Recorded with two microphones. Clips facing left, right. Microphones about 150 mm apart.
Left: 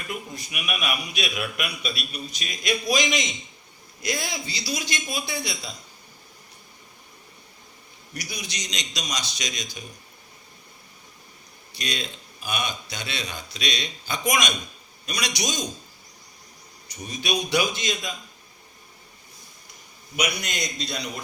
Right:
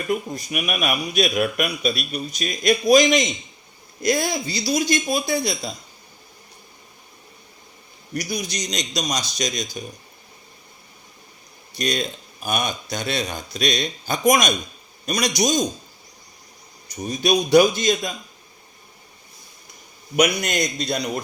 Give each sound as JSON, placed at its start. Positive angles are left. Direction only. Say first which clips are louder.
{"t": 0.1, "sound": "a man's voice", "louder": "right 10 dB", "side_deg": -45}
{"t": 8.1, "sound": "a man's voice", "louder": "right 9 dB", "side_deg": -45}
{"t": 11.8, "sound": "a man's voice", "louder": "right 8 dB", "side_deg": -45}
{"t": 16.9, "sound": "a man's voice", "louder": "right 8 dB", "side_deg": -40}
{"t": 20.1, "sound": "a man's voice", "louder": "right 9 dB", "side_deg": -50}